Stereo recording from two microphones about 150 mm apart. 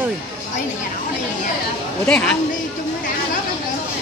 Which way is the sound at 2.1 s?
5° left (ahead or behind).